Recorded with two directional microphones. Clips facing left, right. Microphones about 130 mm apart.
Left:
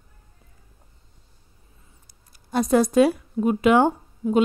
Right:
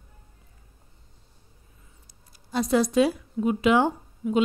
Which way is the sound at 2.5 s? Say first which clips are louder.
Left 3 dB; 50° left (ahead or behind).